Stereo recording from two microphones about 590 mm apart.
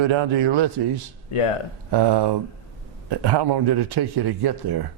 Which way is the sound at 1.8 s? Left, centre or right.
Right.